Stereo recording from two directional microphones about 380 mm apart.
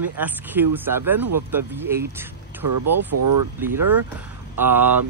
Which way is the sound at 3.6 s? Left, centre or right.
Centre.